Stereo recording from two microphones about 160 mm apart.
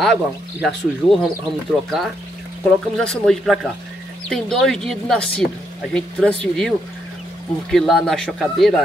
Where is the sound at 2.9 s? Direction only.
5° left (ahead or behind).